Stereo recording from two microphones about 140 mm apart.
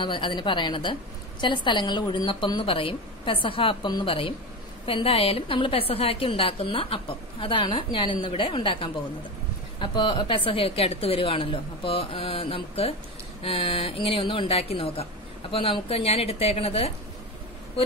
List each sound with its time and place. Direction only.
0.0 s a woman's voice: 35° left (ahead or behind)